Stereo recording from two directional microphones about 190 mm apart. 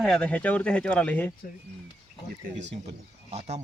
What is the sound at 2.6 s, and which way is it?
Speech, 35° right (ahead or behind).